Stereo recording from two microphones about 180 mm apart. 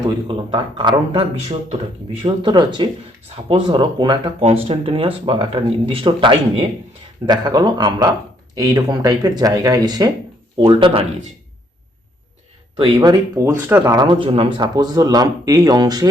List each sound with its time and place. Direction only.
0.3 s speech: 25° right (ahead or behind)
12.7 s speech: 25° right (ahead or behind)